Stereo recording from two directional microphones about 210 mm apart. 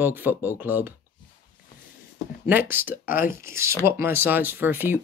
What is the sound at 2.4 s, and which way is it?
Speech, 10° right (ahead or behind).